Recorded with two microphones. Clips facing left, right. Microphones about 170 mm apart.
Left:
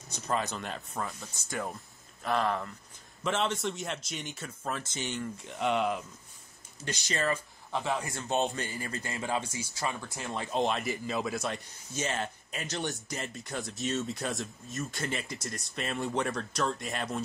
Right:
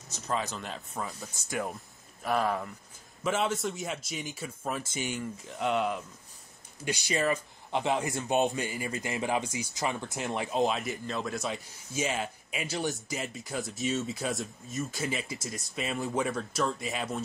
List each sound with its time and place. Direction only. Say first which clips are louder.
0.1 s speech: left 1 dB; centre (ahead or behind)
6.8 s speech: right 3 dB; 10° right (ahead or behind)
10.5 s speech: even; centre (ahead or behind)